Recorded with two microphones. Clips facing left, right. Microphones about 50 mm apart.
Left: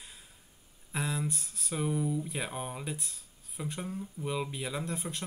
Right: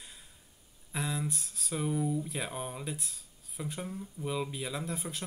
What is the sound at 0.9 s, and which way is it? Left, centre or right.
Speech, centre.